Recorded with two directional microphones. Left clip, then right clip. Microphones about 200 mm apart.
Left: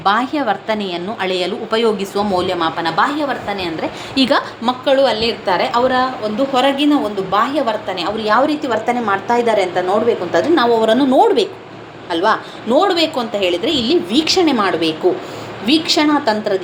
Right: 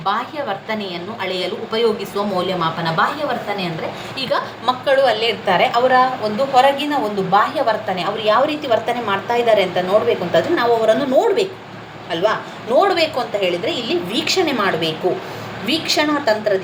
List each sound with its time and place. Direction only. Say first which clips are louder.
0.0 s a woman's voice: left 5 dB; 55° left (ahead or behind)
4.1 s a woman's voice: left 6 dB; 45° left (ahead or behind)
4.6 s a woman's voice: right 1 dB; 25° left (ahead or behind)